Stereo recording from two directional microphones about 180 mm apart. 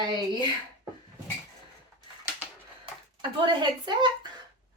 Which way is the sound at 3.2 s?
25° right (ahead or behind).